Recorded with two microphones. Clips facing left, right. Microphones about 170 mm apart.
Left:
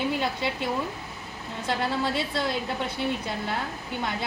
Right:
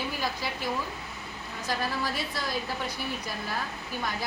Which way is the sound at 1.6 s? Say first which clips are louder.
Left 4 dB; 25° left (ahead or behind).